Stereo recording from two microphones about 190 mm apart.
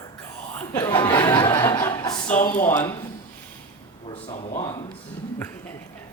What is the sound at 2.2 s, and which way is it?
Speech, 10° left (ahead or behind).